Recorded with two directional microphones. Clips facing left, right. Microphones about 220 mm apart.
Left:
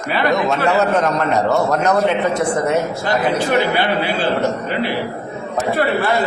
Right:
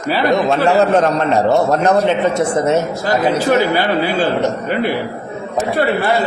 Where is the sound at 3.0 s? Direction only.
40° right (ahead or behind).